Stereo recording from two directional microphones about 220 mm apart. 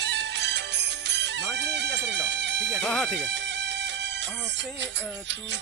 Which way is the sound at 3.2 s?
55° right (ahead or behind).